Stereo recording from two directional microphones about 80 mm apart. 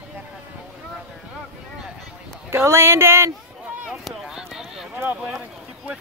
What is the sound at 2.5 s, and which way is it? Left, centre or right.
Speech, right.